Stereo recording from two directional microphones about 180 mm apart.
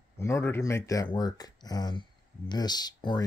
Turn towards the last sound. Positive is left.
turn(degrees=25)  # may be behind; listen again after turning